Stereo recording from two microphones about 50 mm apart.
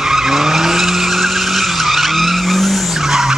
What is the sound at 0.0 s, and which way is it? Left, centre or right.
Vehicle, centre.